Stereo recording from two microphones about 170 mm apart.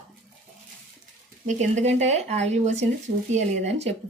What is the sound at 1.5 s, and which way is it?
Speech, 45° right (ahead or behind).